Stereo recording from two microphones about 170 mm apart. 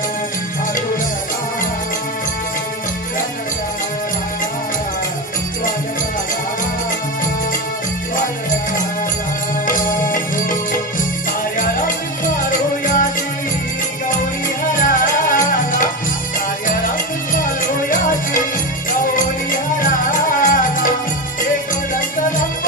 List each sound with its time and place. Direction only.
9.7 s music: 50° left (ahead or behind)
12.4 s music: 50° left (ahead or behind)
14.7 s music: 50° left (ahead or behind)
17.4 s music: 50° left (ahead or behind)